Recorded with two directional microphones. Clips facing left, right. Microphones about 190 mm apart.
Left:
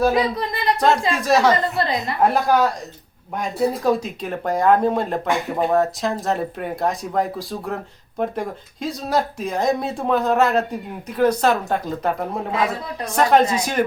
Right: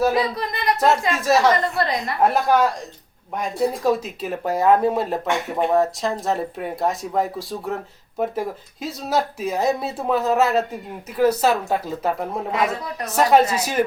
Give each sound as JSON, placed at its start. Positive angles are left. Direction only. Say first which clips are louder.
{"t": 0.1, "sound": "speech", "louder": "left 2 dB", "side_deg": 25}
{"t": 1.1, "sound": "speech", "louder": "left 1 dB", "side_deg": 0}
{"t": 1.8, "sound": "a woman's voice", "louder": "even", "side_deg": 25}
{"t": 2.3, "sound": "speech", "louder": "even", "side_deg": 0}